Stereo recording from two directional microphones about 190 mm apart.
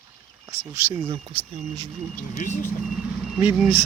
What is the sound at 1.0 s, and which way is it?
Speech, 25° right (ahead or behind).